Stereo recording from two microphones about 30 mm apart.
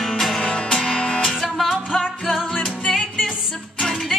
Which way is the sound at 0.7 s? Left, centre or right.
Centre.